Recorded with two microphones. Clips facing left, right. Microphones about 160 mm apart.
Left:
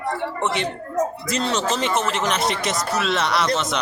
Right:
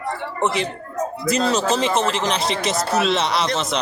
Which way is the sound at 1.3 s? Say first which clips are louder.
Right 3 dB; 35° right (ahead or behind).